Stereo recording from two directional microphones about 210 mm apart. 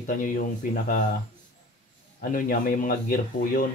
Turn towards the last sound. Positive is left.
turn(degrees=40)  # may be behind; listen again after turning